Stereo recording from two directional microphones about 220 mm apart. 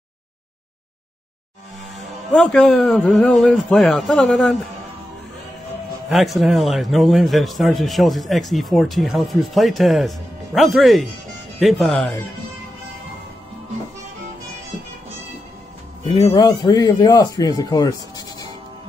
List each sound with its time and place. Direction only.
2.3 s a man's voice: 5° left (ahead or behind)
6.0 s a man's voice: centre (ahead or behind)
16.3 s speech: 15° left (ahead or behind)